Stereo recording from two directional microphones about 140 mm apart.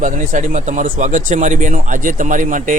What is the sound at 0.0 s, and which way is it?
Speech, 65° right (ahead or behind).